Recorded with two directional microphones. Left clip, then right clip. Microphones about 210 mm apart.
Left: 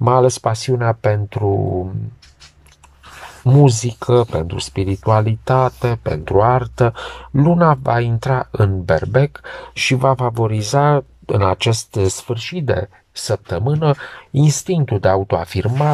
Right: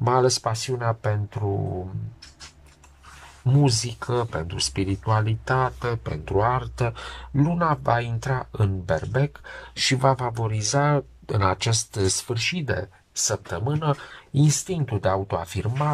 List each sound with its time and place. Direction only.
0.0 s speech: 15° left (ahead or behind)
0.5 s speech: 30° left (ahead or behind)
3.4 s speech: 20° left (ahead or behind)
7.0 s speech: 15° left (ahead or behind)
14.1 s speech: 10° left (ahead or behind)
14.5 s speech: 25° left (ahead or behind)